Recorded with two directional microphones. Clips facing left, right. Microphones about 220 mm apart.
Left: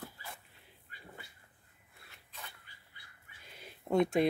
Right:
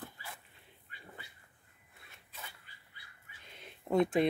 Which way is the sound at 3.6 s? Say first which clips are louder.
Even; centre (ahead or behind).